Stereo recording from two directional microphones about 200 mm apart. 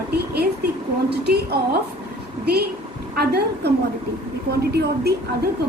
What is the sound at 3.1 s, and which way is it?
A woman's voice, 55° right (ahead or behind).